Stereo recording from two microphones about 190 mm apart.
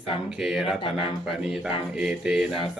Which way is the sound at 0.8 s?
25° left (ahead or behind).